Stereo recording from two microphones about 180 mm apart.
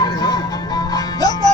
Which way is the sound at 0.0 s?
20° left (ahead or behind).